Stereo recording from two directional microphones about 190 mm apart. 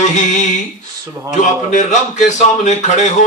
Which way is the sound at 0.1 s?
40° left (ahead or behind).